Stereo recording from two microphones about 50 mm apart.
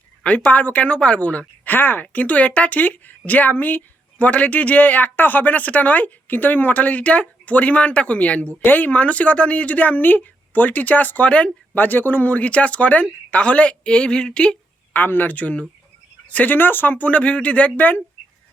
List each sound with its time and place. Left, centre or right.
0.2 s speech: left
1.7 s speech: left
11.8 s speech: left; by 14.6 s centre
14.9 s speech: left
16.6 s speech: left